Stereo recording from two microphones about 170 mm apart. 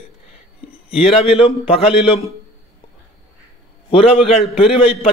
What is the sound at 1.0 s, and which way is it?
A man's voice, 35° left (ahead or behind).